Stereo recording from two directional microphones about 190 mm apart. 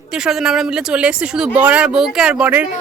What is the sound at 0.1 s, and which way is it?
Speech, centre (ahead or behind).